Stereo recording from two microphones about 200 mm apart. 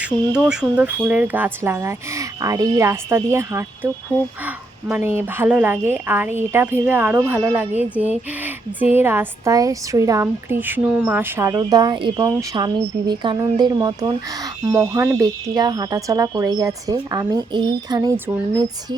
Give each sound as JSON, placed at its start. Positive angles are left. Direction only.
{"t": 0.0, "sound": "a woman's voice", "side_deg": -5}